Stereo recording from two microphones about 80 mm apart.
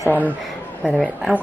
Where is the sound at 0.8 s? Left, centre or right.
Centre.